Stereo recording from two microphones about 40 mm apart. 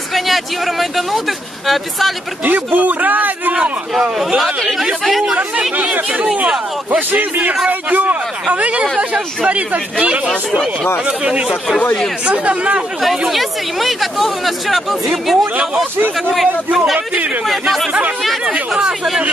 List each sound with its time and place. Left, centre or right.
0.1 s speech: centre
2.4 s speech: right
4.4 s speech: centre
6.9 s speech: right
13.3 s speech: centre
15.5 s speech: right
17.5 s speech: centre
18.7 s speech: centre